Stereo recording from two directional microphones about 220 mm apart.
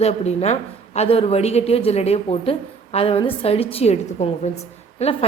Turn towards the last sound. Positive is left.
turn(degrees=30)  # may be behind; listen again after turning